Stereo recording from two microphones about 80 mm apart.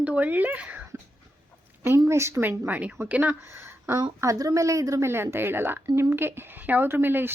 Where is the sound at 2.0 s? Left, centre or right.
Right.